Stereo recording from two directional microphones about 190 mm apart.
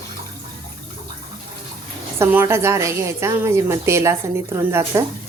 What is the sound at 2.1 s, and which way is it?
A woman's voice, 15° right (ahead or behind).